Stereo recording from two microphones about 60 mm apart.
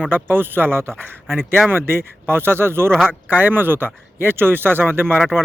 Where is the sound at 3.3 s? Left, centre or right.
Right.